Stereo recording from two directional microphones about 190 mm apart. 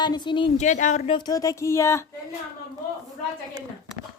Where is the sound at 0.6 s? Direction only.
40° left (ahead or behind).